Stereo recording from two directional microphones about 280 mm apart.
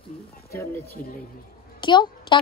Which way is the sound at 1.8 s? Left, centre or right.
Centre.